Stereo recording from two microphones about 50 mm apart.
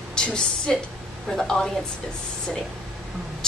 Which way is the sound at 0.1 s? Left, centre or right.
Centre.